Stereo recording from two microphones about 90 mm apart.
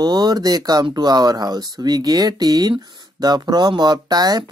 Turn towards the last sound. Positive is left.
turn(degrees=-50)  # may be behind; listen again after turning